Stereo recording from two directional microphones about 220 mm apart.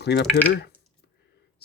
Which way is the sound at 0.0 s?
50° left (ahead or behind).